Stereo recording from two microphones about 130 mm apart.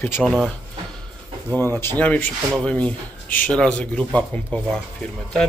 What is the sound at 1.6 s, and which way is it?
Speech, 20° left (ahead or behind).